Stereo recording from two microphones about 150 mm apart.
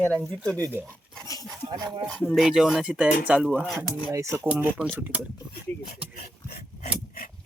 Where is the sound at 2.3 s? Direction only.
5° right (ahead or behind).